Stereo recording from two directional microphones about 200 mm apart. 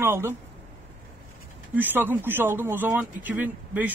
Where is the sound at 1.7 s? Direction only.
10° right (ahead or behind).